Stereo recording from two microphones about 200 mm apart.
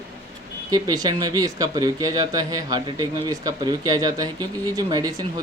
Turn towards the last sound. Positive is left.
turn(degrees=-20)  # may be behind; listen again after turning